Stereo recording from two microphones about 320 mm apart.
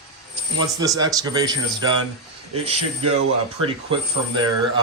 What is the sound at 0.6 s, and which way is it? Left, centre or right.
Speech, centre.